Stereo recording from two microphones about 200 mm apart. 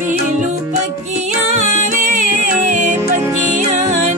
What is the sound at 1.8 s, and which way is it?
Music, 40° right (ahead or behind).